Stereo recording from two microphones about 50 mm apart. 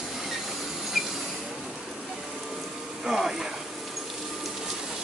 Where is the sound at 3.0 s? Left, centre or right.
Centre.